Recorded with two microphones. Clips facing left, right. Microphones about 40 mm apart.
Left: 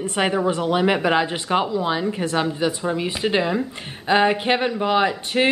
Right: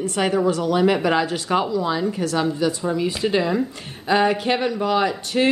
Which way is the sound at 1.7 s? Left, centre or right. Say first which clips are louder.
Even; left.